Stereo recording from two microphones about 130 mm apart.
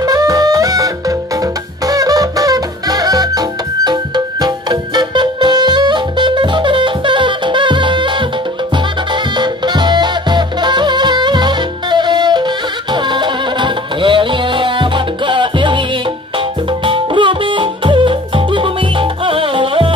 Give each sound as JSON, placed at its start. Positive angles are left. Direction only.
{"t": 0.0, "sound": "saxophone", "side_deg": -30}
{"t": 1.9, "sound": "music", "side_deg": -25}
{"t": 9.4, "sound": "music", "side_deg": -35}
{"t": 16.8, "sound": "music", "side_deg": -40}